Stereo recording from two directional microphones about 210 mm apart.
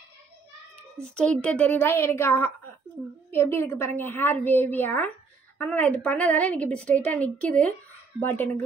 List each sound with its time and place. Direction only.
1.1 s a woman's voice: 5° left (ahead or behind)